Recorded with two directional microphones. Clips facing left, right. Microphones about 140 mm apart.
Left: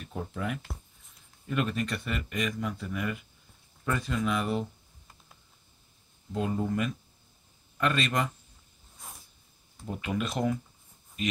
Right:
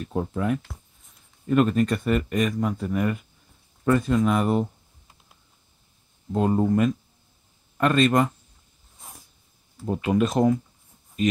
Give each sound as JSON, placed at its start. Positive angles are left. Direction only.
{"t": 0.0, "sound": "speech", "side_deg": -50}
{"t": 6.3, "sound": "speech", "side_deg": -45}
{"t": 9.8, "sound": "speech", "side_deg": -40}